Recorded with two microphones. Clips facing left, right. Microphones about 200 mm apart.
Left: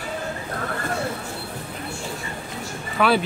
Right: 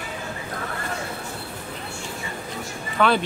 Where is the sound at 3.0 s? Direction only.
5° left (ahead or behind).